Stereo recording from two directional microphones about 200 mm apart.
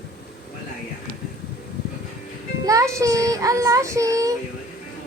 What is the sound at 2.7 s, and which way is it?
Child singing, 15° right (ahead or behind).